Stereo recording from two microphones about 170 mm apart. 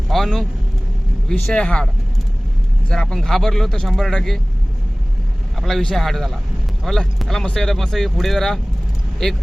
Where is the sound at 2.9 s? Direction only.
5° left (ahead or behind).